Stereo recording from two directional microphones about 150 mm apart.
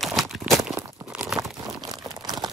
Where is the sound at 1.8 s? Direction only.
25° right (ahead or behind).